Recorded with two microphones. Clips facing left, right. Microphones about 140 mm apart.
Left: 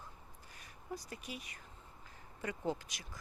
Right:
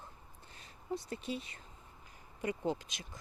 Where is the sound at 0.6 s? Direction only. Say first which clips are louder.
Right 6 dB; 25° right (ahead or behind).